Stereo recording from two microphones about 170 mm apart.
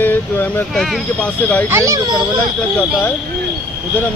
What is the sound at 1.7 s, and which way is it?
Speech, 20° right (ahead or behind).